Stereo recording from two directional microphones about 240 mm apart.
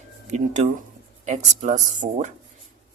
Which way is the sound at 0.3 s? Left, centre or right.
Right.